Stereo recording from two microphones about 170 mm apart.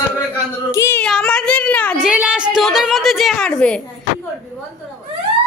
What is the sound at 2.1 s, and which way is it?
A woman's voice, 5° right (ahead or behind).